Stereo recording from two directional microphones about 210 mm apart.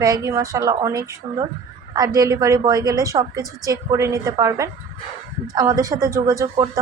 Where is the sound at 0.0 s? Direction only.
15° right (ahead or behind).